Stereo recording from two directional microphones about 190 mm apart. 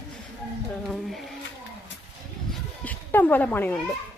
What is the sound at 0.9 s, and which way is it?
Speech, centre (ahead or behind).